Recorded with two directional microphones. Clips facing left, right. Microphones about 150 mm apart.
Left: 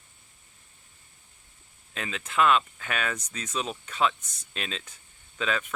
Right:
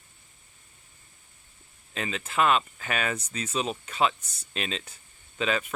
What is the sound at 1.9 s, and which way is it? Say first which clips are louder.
Speech: right 3 dB; centre (ahead or behind).